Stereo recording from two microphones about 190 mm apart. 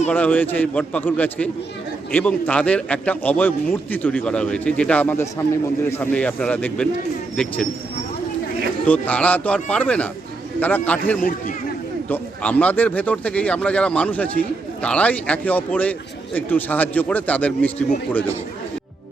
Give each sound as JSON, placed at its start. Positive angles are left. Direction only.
{"t": 0.1, "sound": "a man's voice", "side_deg": 10}
{"t": 8.9, "sound": "a man's voice", "side_deg": 5}
{"t": 11.2, "sound": "a man's voice", "side_deg": 50}
{"t": 12.0, "sound": "a man's voice", "side_deg": 10}